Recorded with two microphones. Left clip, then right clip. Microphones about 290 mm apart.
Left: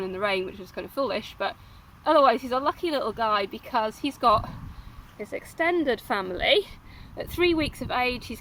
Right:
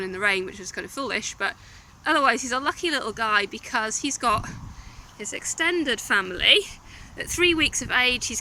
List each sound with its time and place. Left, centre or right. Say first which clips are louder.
0.0 s speech: right 3 dB; centre